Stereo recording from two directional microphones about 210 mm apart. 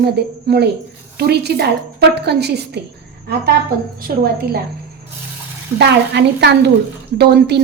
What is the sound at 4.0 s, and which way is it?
Speech, 45° right (ahead or behind).